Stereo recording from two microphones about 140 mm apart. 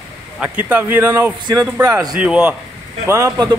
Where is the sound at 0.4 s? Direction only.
10° right (ahead or behind).